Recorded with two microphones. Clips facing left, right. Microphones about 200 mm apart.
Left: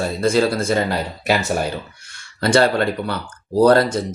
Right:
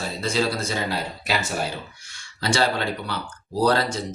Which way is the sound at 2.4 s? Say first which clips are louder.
Left 7 dB; 55° left (ahead or behind).